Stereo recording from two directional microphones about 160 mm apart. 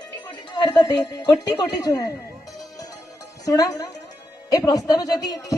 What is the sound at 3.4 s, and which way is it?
A woman's voice, 25° left (ahead or behind).